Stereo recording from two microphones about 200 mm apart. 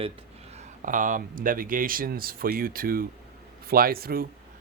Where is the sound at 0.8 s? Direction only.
40° right (ahead or behind).